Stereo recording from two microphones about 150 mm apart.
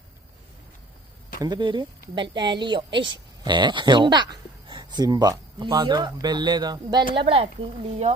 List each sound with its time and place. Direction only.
1.4 s a woman's voice: 30° right (ahead or behind)